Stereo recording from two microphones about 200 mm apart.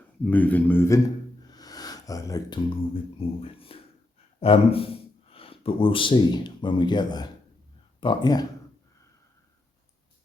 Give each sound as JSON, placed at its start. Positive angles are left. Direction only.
{"t": 0.3, "sound": "a man's voice", "side_deg": 10}